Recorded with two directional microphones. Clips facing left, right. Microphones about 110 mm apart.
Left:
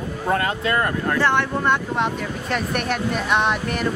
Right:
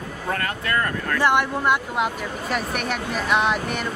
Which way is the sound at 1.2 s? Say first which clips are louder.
Right 2 dB; 10° right (ahead or behind).